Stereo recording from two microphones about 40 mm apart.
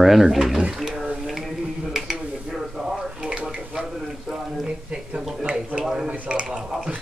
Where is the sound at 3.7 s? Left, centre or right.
Centre.